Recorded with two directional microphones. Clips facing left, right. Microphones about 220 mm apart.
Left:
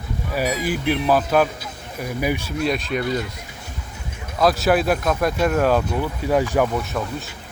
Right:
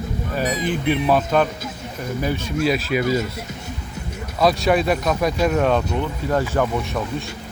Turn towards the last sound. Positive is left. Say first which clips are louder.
# right 2 dB
turn(degrees=0)  # may be behind; listen again after turning